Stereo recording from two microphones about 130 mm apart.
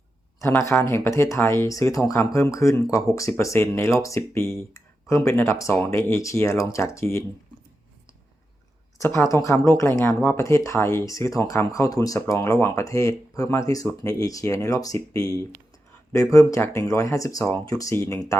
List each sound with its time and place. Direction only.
0.6 s speech: 20° left (ahead or behind)
9.0 s speech: 20° left (ahead or behind)